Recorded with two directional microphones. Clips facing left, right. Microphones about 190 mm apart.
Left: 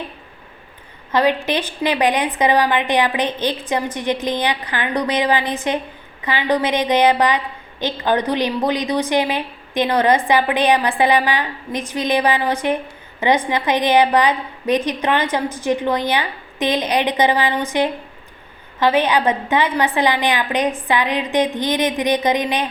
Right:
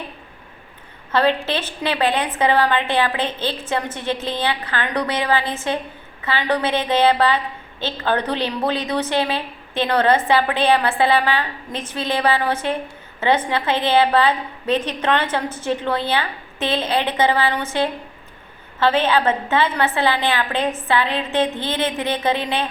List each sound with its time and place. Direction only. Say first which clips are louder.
1.1 s a woman's voice: left 1 dB; 15° left (ahead or behind)